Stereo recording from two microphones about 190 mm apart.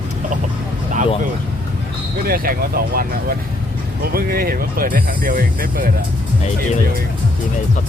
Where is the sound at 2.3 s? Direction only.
50° right (ahead or behind).